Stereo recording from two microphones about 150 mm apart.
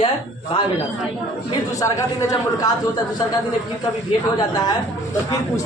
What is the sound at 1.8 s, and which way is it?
Speech, 20° left (ahead or behind).